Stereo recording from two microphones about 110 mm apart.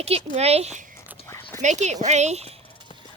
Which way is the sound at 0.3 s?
75° right (ahead or behind).